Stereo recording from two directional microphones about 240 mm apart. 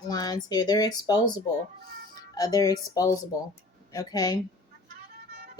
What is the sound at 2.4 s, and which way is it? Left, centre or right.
Speech, centre.